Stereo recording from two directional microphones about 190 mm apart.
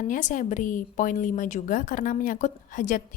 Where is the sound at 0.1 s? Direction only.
45° left (ahead or behind).